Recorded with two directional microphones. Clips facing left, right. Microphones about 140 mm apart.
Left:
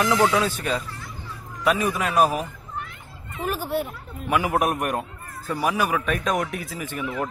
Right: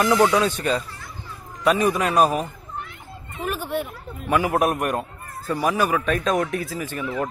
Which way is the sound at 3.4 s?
35° left (ahead or behind).